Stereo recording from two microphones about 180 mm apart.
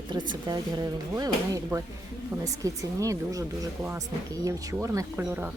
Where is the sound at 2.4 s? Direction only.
20° right (ahead or behind).